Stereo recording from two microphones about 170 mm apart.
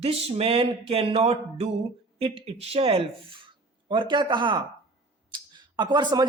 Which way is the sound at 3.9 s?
30° right (ahead or behind).